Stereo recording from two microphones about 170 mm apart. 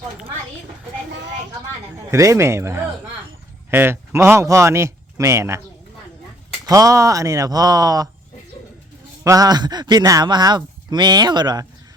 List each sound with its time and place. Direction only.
2.0 s speech: 20° right (ahead or behind)
6.7 s speech: 20° right (ahead or behind)
9.2 s speech: 20° right (ahead or behind)